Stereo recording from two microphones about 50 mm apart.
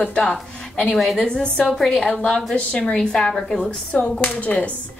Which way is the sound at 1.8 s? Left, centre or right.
Centre.